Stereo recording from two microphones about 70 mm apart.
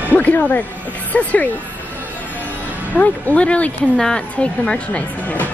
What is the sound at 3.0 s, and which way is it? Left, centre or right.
Speech, centre.